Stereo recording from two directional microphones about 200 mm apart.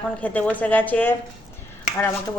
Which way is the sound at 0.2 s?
5° left (ahead or behind).